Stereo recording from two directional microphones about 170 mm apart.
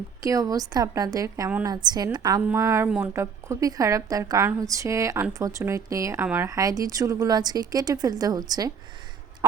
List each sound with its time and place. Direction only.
0.2 s a woman's voice: 20° right (ahead or behind)
9.4 s fowl: 20° right (ahead or behind)